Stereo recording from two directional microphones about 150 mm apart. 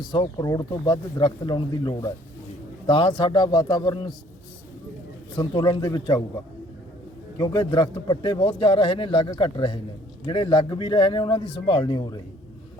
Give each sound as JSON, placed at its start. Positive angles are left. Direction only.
{"t": 0.1, "sound": "a man's voice", "side_deg": 30}
{"t": 5.4, "sound": "speech", "side_deg": 30}
{"t": 7.3, "sound": "a man's voice", "side_deg": 30}